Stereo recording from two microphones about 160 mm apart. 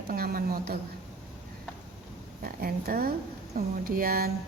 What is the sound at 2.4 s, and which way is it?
A woman's voice, 70° right (ahead or behind).